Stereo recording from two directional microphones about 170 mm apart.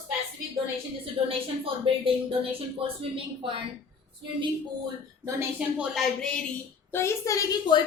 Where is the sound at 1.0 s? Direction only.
35° right (ahead or behind).